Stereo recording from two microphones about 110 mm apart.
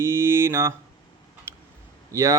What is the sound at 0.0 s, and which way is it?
Mantra, 25° right (ahead or behind).